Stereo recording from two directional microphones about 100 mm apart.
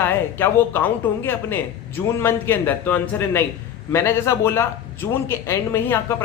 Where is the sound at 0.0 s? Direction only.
20° left (ahead or behind).